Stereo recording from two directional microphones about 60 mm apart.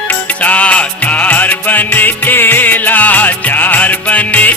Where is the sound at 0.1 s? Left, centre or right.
Left.